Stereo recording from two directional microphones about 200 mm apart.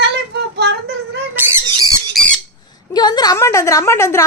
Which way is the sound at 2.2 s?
5° left (ahead or behind).